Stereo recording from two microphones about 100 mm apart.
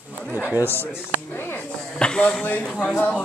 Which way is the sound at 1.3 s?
20° left (ahead or behind).